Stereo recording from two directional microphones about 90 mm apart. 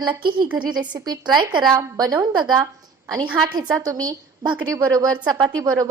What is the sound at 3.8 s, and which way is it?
A woman's voice, 45° right (ahead or behind).